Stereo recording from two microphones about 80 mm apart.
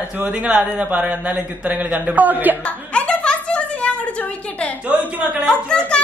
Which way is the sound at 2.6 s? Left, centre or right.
Centre.